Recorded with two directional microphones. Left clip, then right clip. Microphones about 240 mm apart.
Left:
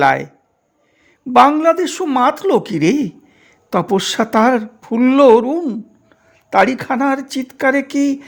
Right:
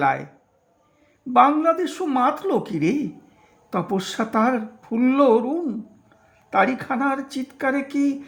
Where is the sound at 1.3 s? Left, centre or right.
Left.